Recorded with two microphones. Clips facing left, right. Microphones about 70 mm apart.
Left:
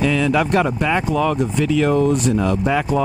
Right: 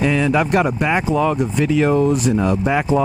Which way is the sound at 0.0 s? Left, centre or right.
Centre.